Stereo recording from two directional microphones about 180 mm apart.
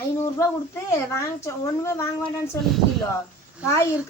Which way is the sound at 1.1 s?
15° left (ahead or behind).